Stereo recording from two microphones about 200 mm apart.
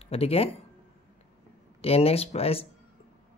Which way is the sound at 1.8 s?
30° left (ahead or behind).